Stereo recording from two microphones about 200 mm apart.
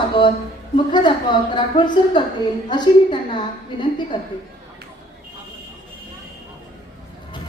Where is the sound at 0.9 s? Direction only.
20° left (ahead or behind).